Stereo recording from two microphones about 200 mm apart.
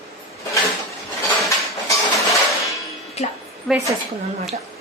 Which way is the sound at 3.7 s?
Centre (ahead or behind).